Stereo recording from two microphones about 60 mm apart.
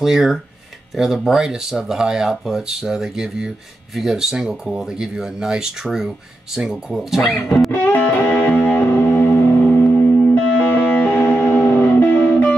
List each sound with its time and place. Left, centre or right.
0.0 s speech: centre
7.7 s music: left